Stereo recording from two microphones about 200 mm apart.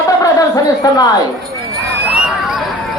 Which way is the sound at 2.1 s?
5° right (ahead or behind).